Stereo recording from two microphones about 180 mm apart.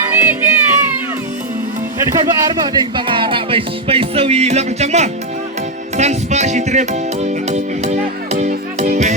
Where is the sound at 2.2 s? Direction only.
25° right (ahead or behind).